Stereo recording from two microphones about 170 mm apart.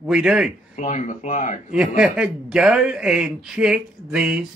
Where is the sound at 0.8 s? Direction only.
45° left (ahead or behind).